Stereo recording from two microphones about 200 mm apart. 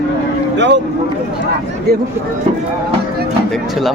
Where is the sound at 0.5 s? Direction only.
65° right (ahead or behind).